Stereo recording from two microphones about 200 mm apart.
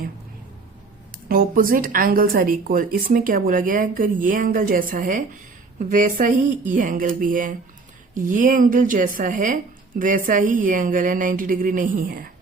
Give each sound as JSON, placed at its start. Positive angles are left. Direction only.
{"t": 1.1, "sound": "a woman's voice", "side_deg": -45}